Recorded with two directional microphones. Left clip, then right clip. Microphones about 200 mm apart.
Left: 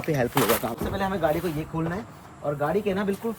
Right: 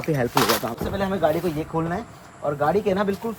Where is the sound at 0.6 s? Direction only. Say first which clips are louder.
Right 2 dB; 10° right (ahead or behind).